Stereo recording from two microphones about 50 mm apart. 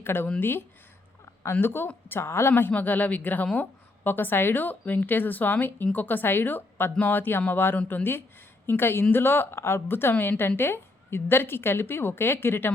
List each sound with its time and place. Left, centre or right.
0.0 s a woman's voice: left
1.6 s a woman's voice: left
2.5 s a woman's voice: left
2.7 s a woman's voice: left